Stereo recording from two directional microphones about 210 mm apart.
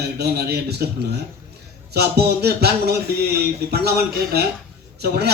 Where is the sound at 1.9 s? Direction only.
50° right (ahead or behind).